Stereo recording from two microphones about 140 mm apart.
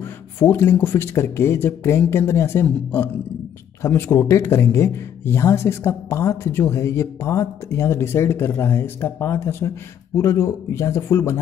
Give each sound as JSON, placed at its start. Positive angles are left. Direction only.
{"t": 0.0, "sound": "speech", "side_deg": 15}